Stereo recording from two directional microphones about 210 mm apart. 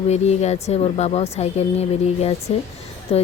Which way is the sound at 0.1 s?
30° left (ahead or behind).